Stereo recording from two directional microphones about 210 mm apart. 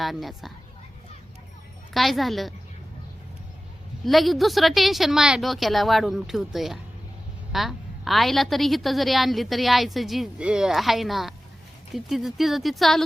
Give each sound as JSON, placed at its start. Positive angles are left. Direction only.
{"t": 0.0, "sound": "a woman's voice", "side_deg": 0}
{"t": 1.9, "sound": "a woman's voice", "side_deg": 0}
{"t": 4.0, "sound": "a woman's voice", "side_deg": 0}